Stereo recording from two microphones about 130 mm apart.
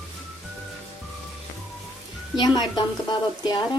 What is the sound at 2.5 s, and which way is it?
Speech, 35° left (ahead or behind).